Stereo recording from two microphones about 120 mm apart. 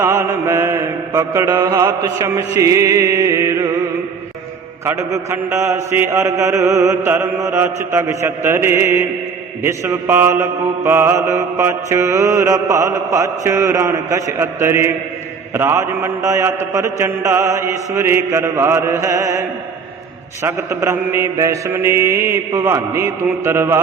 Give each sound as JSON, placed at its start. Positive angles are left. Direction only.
{"t": 0.0, "sound": "mantra", "side_deg": -20}
{"t": 4.9, "sound": "mantra", "side_deg": -25}
{"t": 20.4, "sound": "mantra", "side_deg": -25}